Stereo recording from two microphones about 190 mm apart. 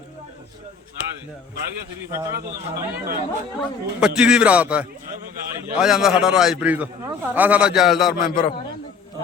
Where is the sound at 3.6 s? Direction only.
5° right (ahead or behind).